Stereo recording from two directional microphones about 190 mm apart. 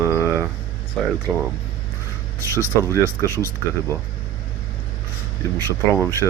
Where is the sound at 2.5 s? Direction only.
15° right (ahead or behind).